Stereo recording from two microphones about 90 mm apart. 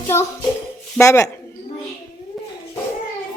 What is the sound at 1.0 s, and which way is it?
Speech, 35° left (ahead or behind).